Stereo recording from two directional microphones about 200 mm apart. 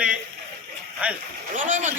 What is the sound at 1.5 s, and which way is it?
Speech, 40° right (ahead or behind).